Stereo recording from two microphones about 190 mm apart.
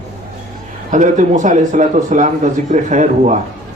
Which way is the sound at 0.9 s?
40° right (ahead or behind).